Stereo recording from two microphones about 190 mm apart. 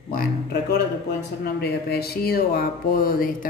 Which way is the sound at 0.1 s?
55° left (ahead or behind).